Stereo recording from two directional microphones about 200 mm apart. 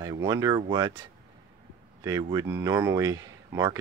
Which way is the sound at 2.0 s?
15° right (ahead or behind).